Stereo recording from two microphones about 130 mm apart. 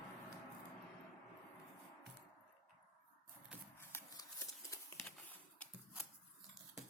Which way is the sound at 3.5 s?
10° right (ahead or behind).